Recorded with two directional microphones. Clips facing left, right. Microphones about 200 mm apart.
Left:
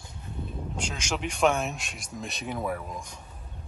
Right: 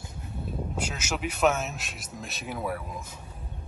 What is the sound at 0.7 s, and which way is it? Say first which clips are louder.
Speech: left 2 dB; 5° right (ahead or behind).